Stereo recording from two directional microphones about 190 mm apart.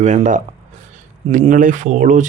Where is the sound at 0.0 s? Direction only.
40° right (ahead or behind).